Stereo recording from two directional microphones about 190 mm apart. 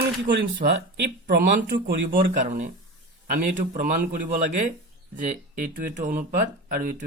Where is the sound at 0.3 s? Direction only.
65° right (ahead or behind).